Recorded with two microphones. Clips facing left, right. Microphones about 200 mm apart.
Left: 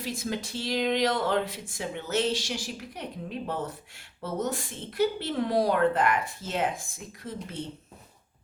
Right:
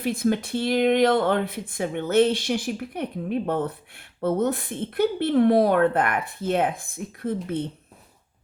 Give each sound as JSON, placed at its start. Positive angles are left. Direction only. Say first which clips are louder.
{"t": 0.0, "sound": "speech", "louder": "right 9 dB", "side_deg": -55}